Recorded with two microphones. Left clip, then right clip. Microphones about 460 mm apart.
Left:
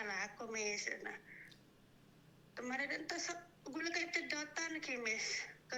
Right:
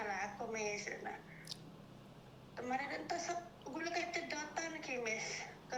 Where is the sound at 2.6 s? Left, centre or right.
Left.